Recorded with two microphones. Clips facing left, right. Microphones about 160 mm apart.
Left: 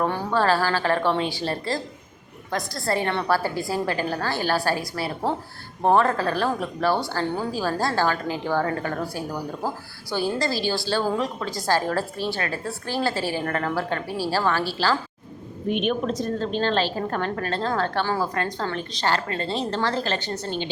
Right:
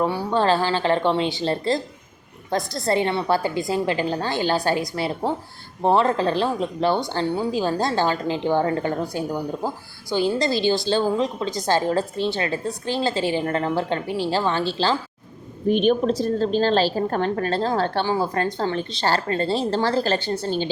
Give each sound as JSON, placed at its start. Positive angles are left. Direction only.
{"t": 0.0, "sound": "a woman's voice", "side_deg": -10}
{"t": 0.3, "sound": "a woman's voice", "side_deg": -20}
{"t": 18.0, "sound": "a woman's voice", "side_deg": -15}
{"t": 18.5, "sound": "a woman's voice", "side_deg": -30}